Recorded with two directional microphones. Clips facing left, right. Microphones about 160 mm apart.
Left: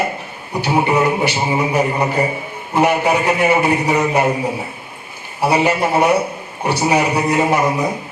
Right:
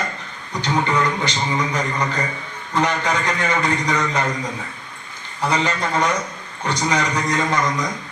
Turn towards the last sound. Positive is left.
turn(degrees=30)  # may be behind; listen again after turning